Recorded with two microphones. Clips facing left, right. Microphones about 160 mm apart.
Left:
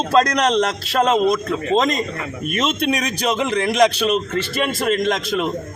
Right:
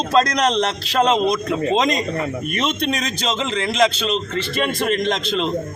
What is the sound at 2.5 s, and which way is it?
A man's voice, 5° left (ahead or behind).